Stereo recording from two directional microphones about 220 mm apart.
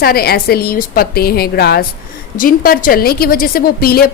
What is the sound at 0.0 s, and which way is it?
A woman's voice, 45° left (ahead or behind).